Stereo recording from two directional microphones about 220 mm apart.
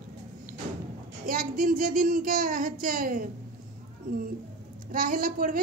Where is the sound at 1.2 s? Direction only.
40° right (ahead or behind).